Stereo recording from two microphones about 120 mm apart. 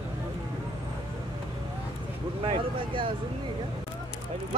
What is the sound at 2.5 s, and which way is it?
Vehicle, 45° right (ahead or behind).